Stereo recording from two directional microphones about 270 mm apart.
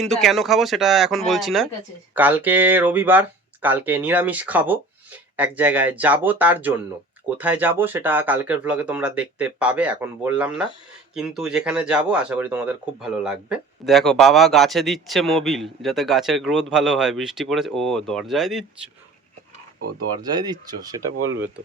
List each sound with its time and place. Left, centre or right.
0.0 s speech: centre
20.3 s speech: centre
21.2 s speech: right